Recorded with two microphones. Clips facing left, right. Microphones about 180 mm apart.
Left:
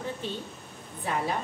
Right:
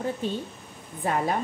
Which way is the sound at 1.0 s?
45° right (ahead or behind).